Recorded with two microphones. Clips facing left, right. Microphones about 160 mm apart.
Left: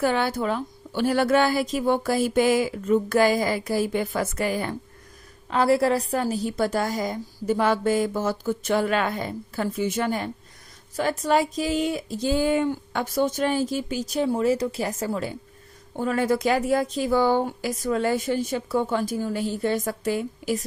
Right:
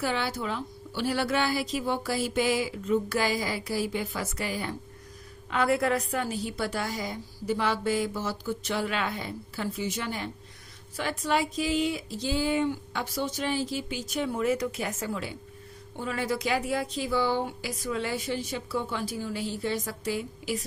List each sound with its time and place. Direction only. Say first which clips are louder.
0.0 s a woman's voice: left 7 dB; 50° left (ahead or behind)
5.5 s a woman's voice: left 5 dB; 35° left (ahead or behind)